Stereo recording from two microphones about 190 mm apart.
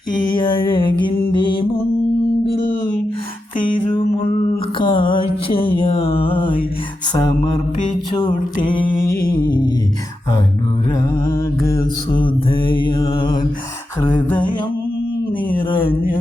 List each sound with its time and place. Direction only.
0.2 s music: 25° left (ahead or behind)
4.8 s music: 25° left (ahead or behind)
7.1 s mantra: 20° left (ahead or behind)
9.4 s a sound: 20° left (ahead or behind)
12.1 s mantra: 25° left (ahead or behind)
14.0 s a sound: 25° left (ahead or behind)